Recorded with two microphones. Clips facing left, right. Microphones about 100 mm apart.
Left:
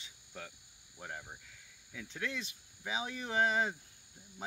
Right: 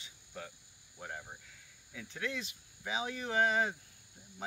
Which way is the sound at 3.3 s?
20° left (ahead or behind).